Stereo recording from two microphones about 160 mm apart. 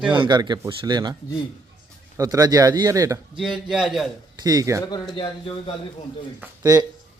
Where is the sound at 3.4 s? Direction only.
5° right (ahead or behind).